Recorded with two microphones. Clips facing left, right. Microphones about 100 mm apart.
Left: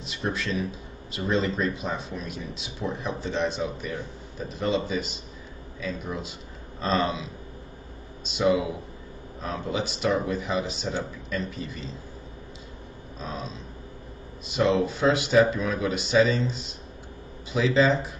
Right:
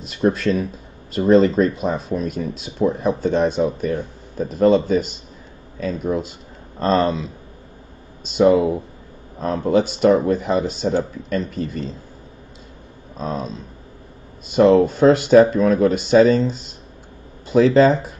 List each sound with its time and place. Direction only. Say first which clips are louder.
0.1 s speech: right 11 dB; 45° right (ahead or behind)
8.3 s speech: right 9 dB; 45° right (ahead or behind)
13.2 s speech: right 9 dB; 40° right (ahead or behind)
14.6 s speech: right 10 dB; 45° right (ahead or behind)